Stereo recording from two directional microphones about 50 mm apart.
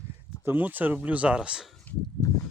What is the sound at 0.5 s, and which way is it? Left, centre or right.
Speech, right.